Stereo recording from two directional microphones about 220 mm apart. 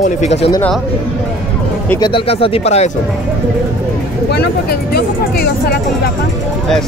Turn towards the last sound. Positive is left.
turn(degrees=45)  # may be behind; listen again after turning